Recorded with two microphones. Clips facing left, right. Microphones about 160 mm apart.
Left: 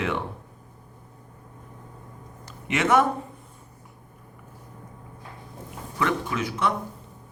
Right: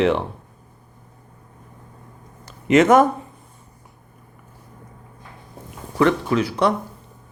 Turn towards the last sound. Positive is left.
turn(degrees=-35)  # may be behind; listen again after turning